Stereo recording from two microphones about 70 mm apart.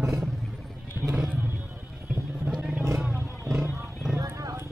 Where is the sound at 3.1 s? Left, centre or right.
Right.